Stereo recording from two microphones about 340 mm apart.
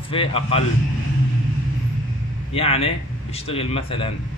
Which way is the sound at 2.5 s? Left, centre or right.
Centre.